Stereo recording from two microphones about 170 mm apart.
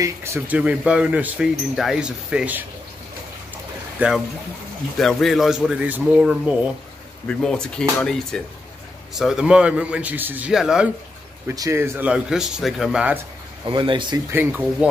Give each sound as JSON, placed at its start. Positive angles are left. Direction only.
{"t": 0.0, "sound": "speech", "side_deg": -15}
{"t": 4.0, "sound": "speech", "side_deg": -10}
{"t": 4.9, "sound": "speech", "side_deg": 0}
{"t": 7.2, "sound": "speech", "side_deg": 5}
{"t": 11.4, "sound": "speech", "side_deg": -20}
{"t": 13.7, "sound": "speech", "side_deg": -30}
{"t": 14.3, "sound": "speech", "side_deg": -10}